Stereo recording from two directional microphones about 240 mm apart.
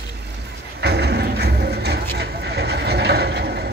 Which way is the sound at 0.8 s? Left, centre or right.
Right.